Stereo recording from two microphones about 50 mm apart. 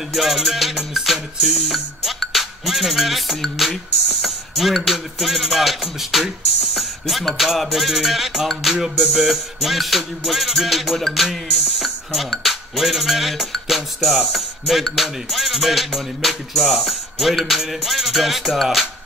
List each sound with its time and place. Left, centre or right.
0.1 s music: centre